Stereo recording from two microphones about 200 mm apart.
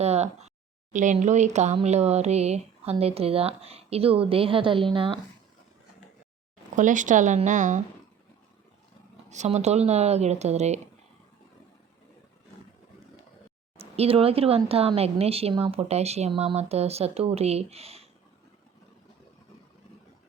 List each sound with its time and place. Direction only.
0.0 s a sound: 35° right (ahead or behind)
0.9 s speech: 40° right (ahead or behind)
6.7 s speech: 40° right (ahead or behind)
9.3 s speech: 35° right (ahead or behind)
13.7 s speech: 30° right (ahead or behind)